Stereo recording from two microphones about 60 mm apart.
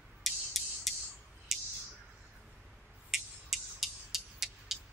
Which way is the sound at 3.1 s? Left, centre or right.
Centre.